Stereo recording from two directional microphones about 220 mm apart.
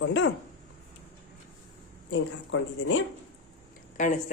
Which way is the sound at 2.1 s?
60° left (ahead or behind).